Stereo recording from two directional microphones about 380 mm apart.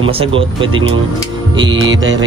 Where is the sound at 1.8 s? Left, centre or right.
Right.